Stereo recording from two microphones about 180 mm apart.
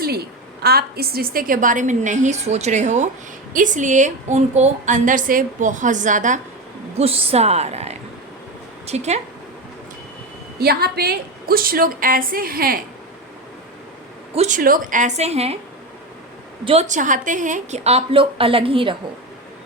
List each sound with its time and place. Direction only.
0.6 s a woman's voice: 60° right (ahead or behind); by 6.4 s 45° right (ahead or behind)
6.9 s a woman's voice: 35° right (ahead or behind)
10.6 s a woman's voice: 60° right (ahead or behind)
14.3 s a woman's voice: 45° right (ahead or behind)
16.6 s a woman's voice: 40° right (ahead or behind)